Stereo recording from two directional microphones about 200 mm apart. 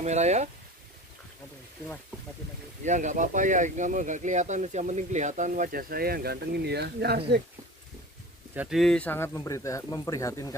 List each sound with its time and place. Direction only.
0.0 s speech: 35° right (ahead or behind)
2.8 s speech: 40° right (ahead or behind); by 7.2 s 55° right (ahead or behind)
8.5 s speech: centre (ahead or behind); by 10.5 s 15° left (ahead or behind)